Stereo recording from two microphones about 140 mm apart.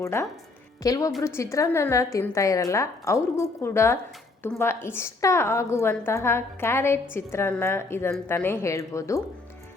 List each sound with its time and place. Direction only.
0.0 s a woman's voice: 20° left (ahead or behind)